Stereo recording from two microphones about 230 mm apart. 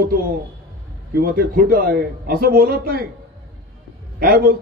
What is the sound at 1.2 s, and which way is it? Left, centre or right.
A man's voice, right.